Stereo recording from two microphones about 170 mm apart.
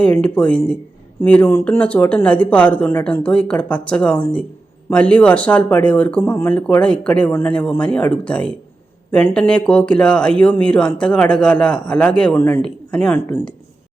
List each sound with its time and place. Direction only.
0.0 s speech: 5° left (ahead or behind)